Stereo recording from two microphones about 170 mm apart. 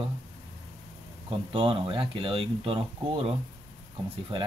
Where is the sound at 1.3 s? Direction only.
30° right (ahead or behind).